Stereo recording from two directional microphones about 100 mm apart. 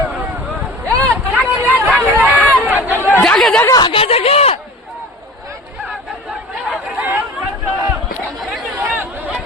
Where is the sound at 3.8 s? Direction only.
70° left (ahead or behind); by 4.5 s 85° left.